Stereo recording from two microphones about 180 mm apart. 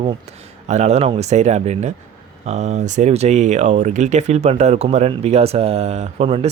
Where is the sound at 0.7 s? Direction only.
40° right (ahead or behind).